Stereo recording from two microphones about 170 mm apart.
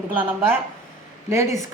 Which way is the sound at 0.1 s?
10° right (ahead or behind).